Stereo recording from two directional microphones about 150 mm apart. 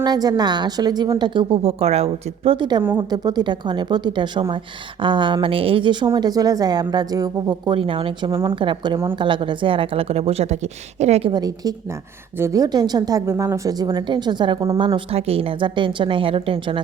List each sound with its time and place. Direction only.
0.0 s a woman's voice: 25° right (ahead or behind)
7.7 s speech: 35° right (ahead or behind)
11.3 s a woman's voice: 25° right (ahead or behind)